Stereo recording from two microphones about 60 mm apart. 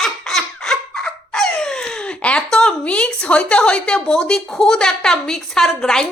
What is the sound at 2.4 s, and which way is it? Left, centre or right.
A woman's voice, centre.